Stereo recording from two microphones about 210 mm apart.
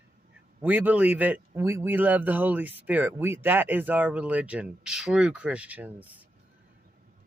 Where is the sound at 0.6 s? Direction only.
10° right (ahead or behind).